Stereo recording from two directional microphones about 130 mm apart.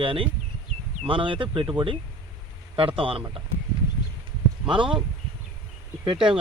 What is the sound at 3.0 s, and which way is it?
Speech, 45° right (ahead or behind).